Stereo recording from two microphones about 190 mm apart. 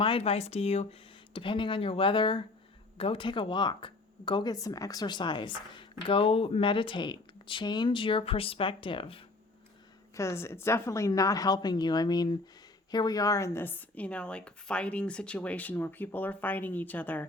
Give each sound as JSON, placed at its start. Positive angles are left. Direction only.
{"t": 0.0, "sound": "speech", "side_deg": 30}
{"t": 10.2, "sound": "a woman's voice", "side_deg": 15}